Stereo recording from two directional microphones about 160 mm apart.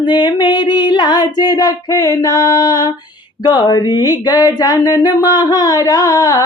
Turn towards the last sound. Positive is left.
turn(degrees=20)  # may be behind; listen again after turning